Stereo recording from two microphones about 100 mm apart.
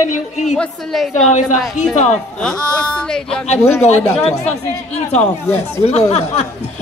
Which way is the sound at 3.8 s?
90° left.